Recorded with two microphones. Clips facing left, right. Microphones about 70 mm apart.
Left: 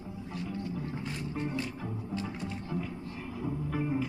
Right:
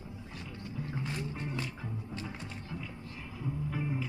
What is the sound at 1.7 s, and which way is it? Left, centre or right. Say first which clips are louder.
Music: left 4 dB; left.